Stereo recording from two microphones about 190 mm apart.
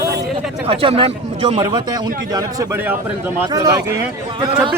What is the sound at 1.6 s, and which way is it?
A man's voice, 20° right (ahead or behind).